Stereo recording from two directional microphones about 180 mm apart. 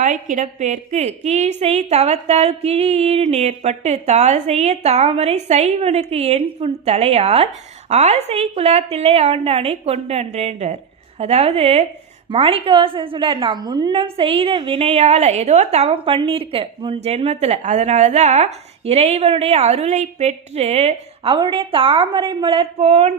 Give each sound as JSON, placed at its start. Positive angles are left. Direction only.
{"t": 0.0, "sound": "a woman's voice", "side_deg": -45}